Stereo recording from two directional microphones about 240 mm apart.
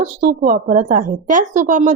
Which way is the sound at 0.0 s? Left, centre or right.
Right.